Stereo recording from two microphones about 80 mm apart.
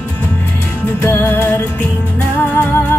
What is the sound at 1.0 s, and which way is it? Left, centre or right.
Music, left.